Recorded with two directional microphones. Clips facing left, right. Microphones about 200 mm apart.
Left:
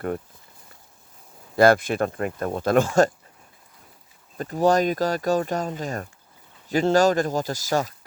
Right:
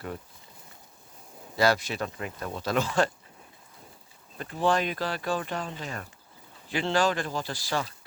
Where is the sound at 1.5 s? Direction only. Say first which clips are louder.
Left 8 dB; 50° left (ahead or behind).